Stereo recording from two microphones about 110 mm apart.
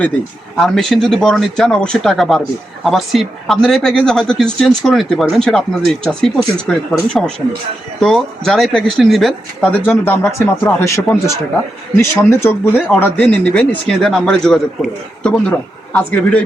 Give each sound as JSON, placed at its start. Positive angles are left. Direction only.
{"t": 0.5, "sound": "a man's voice", "side_deg": 5}